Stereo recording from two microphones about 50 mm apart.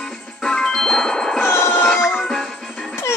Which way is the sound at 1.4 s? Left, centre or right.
Left.